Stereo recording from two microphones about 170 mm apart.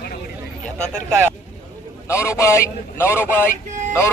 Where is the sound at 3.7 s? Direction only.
45° right (ahead or behind).